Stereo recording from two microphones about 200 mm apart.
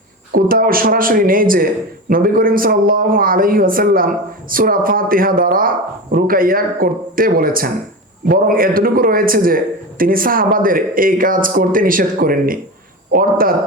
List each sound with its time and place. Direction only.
0.3 s a man's voice: 45° right (ahead or behind)